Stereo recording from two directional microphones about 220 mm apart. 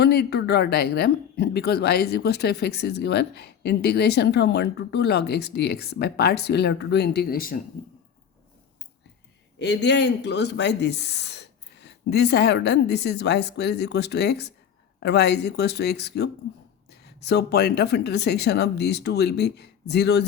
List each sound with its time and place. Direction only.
0.0 s speech: 45° left (ahead or behind)
9.6 s speech: 50° left (ahead or behind)